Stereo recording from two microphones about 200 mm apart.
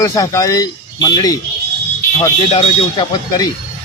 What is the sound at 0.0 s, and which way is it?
Speech, 15° left (ahead or behind).